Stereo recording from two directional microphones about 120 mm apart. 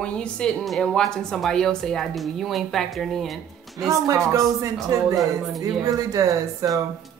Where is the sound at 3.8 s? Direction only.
30° right (ahead or behind).